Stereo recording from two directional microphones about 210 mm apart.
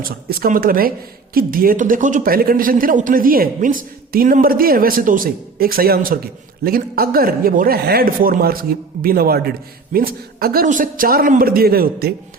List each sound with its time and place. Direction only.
0.0 s speech: 45° right (ahead or behind)